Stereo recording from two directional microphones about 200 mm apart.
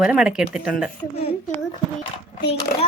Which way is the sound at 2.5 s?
30° left (ahead or behind).